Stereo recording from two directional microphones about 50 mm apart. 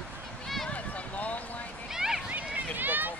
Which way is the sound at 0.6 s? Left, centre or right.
Left.